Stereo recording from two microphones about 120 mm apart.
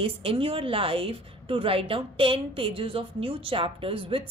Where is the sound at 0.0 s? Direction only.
50° right (ahead or behind).